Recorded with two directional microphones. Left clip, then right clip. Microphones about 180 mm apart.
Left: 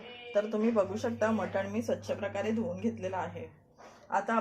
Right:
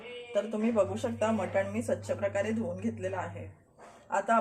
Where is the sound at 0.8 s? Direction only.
Centre (ahead or behind).